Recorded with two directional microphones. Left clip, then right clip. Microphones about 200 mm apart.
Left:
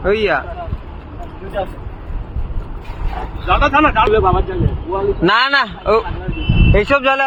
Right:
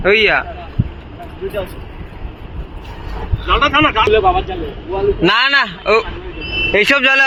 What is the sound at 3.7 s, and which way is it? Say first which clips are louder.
Speech: left 1 dB; 45° left (ahead or behind).